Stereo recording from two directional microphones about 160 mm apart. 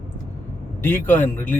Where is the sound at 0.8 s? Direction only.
15° left (ahead or behind).